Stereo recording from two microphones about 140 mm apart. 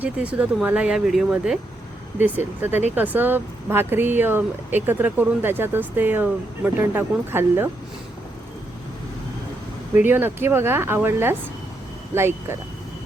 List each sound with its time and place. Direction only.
0.0 s speech: 10° right (ahead or behind)
9.9 s speech: 15° right (ahead or behind)